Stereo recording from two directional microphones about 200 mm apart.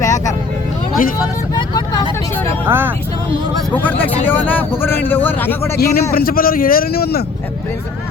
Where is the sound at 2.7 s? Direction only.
10° right (ahead or behind).